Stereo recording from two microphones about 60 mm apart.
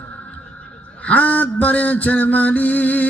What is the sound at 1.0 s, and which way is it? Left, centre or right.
Mantra, left.